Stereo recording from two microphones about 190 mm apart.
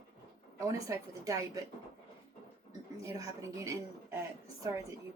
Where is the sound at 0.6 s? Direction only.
15° right (ahead or behind).